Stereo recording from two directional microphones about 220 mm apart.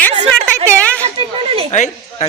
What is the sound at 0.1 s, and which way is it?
Speech, 20° right (ahead or behind).